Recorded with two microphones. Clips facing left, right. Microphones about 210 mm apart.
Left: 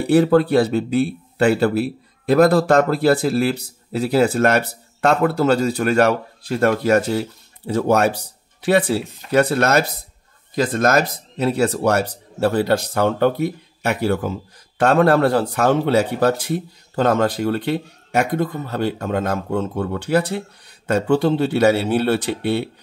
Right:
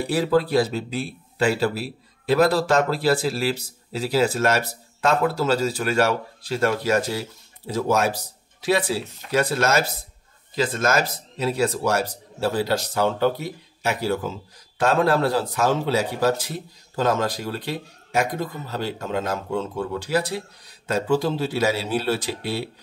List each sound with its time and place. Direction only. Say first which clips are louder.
0.1 s a man's voice: left 7 dB; 60° left (ahead or behind)